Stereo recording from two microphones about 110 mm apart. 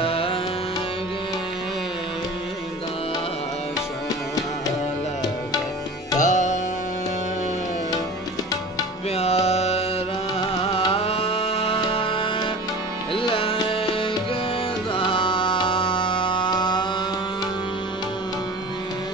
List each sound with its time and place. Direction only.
0.0 s music: 55° left (ahead or behind)
6.1 s tabla: 90° left
9.1 s music: 75° left (ahead or behind)
10.6 s music: 60° left (ahead or behind)
15.0 s music: 50° left (ahead or behind)